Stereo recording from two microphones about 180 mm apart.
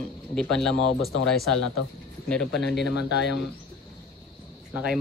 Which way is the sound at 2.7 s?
75° left (ahead or behind).